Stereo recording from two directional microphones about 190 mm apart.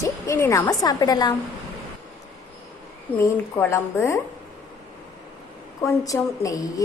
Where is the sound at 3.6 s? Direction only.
15° left (ahead or behind).